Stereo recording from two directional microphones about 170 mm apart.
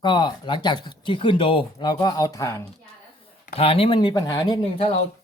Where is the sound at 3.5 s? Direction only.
35° left (ahead or behind).